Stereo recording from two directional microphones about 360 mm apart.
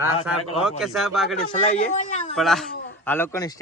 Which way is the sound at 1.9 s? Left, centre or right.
Centre.